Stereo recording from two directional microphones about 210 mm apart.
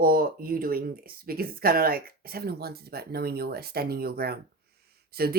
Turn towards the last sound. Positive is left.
turn(degrees=-45)  # may be behind; listen again after turning